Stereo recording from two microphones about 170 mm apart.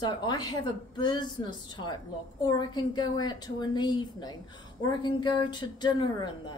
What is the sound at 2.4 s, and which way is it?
Speech, 25° left (ahead or behind).